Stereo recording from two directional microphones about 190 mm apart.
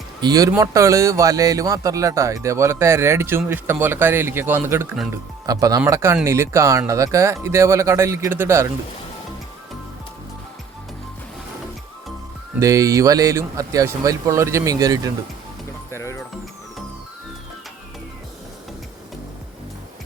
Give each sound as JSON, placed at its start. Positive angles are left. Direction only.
{"t": 0.2, "sound": "speech", "side_deg": -20}
{"t": 12.5, "sound": "speech", "side_deg": -15}
{"t": 15.9, "sound": "music", "side_deg": 15}